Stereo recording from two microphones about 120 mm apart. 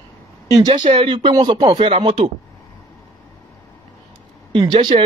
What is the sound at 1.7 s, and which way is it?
Speech, 50° right (ahead or behind).